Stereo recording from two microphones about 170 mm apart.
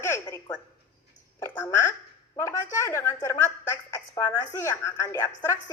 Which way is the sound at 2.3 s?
15° left (ahead or behind).